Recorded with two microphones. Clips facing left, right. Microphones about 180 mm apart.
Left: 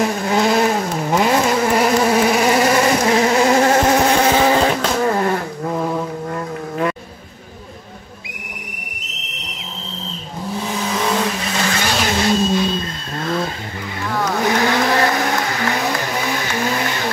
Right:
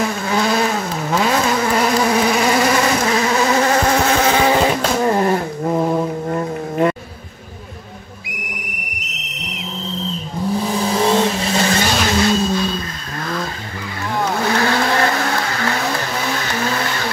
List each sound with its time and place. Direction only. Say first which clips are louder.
0.3 s vehicle: left 2 dB; 20° left (ahead or behind)
1.1 s insect: left 1 dB; 15° left (ahead or behind)
3.0 s insect: left 2 dB; 30° left (ahead or behind); by 4.7 s centre (ahead or behind)
5.0 s a sound: right 3 dB; 20° right (ahead or behind)
10.6 s vehicle: right 3 dB; 35° right (ahead or behind)
12.2 s vehicle: left 2 dB; 25° left (ahead or behind)